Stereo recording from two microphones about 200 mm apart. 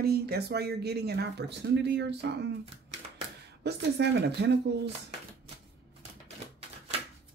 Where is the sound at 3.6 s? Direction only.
55° right (ahead or behind).